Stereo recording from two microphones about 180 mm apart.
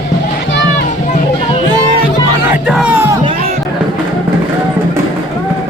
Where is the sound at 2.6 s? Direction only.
5° right (ahead or behind).